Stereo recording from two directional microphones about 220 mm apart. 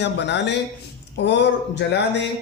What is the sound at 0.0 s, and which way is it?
A man's voice, 50° left (ahead or behind).